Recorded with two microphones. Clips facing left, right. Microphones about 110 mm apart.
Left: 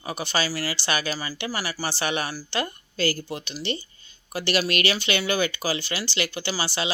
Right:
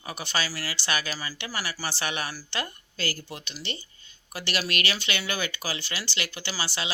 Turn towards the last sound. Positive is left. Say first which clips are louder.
# left 5 dB
turn(degrees=20)  # may be behind; listen again after turning